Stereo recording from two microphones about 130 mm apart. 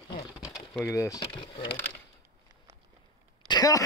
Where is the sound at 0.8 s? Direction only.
25° left (ahead or behind).